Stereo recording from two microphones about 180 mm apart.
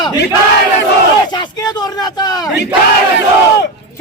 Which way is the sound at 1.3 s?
25° left (ahead or behind).